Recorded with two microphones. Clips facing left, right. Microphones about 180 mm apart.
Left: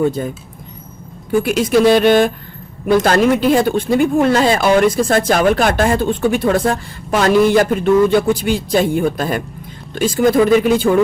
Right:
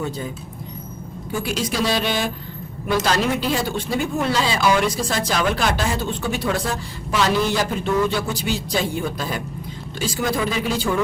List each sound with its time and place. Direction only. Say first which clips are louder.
0.0 s speech: left 10 dB; 55° left (ahead or behind)
1.4 s speech: left 11 dB; 55° left (ahead or behind)